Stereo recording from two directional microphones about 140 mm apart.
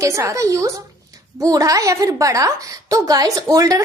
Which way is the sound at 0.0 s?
20° right (ahead or behind).